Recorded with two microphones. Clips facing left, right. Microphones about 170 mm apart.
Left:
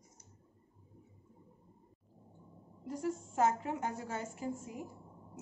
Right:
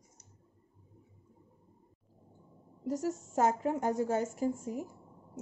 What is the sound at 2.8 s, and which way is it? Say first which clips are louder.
A woman's voice: right 4 dB; 40° right (ahead or behind).